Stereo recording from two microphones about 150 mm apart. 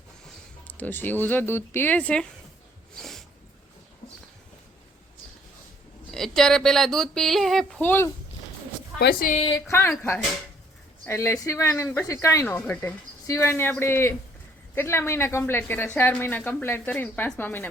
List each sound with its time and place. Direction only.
0.7 s a woman's voice: 10° left (ahead or behind)
3.0 s a sound: centre (ahead or behind)
6.1 s speech: centre (ahead or behind)
7.8 s a woman's voice: 15° left (ahead or behind)
9.0 s a woman's voice: 90° left
9.6 s a woman's voice: 15° left (ahead or behind)